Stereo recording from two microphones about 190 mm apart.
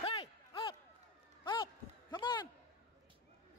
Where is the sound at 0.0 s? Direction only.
30° left (ahead or behind).